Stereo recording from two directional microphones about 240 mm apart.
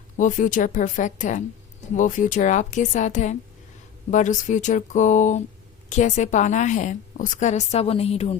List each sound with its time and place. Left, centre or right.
0.2 s a woman's voice: left